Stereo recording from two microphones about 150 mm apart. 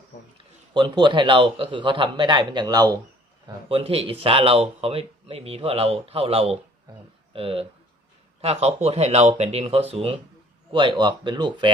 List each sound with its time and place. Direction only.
0.3 s speech: 30° right (ahead or behind)
3.4 s speech: 35° right (ahead or behind)